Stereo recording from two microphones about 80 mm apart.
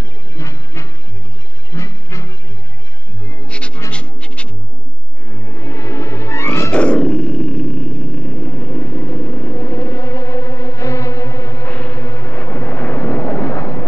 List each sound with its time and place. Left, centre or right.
0.4 s music: left
3.4 s music: centre
5.3 s music: left
6.7 s a sound: centre
8.5 s music: left
11.9 s vehicle: left